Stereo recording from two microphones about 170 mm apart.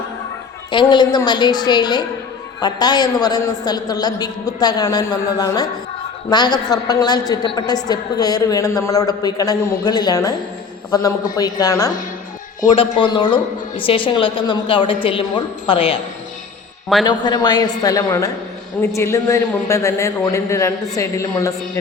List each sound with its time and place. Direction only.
0.7 s a woman's voice: 25° left (ahead or behind)
17.1 s a woman's voice: 25° left (ahead or behind)